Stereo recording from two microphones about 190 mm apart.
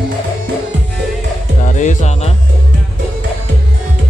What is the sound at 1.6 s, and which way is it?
Speech, 40° left (ahead or behind).